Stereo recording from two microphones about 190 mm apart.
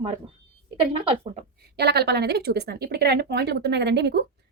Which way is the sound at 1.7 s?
60° right (ahead or behind).